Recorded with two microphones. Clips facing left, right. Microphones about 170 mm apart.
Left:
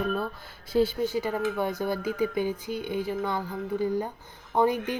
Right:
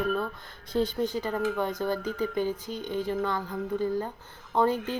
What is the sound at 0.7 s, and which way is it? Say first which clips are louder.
Speech: left 3 dB; 5° left (ahead or behind).